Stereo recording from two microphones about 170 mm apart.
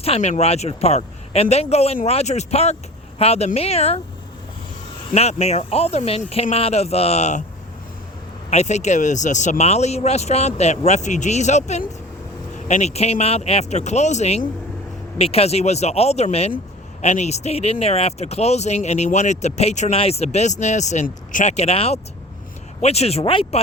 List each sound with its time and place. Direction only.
0.0 s speech: 40° left (ahead or behind)
5.1 s speech: 40° left (ahead or behind)
8.4 s speech: 40° left (ahead or behind)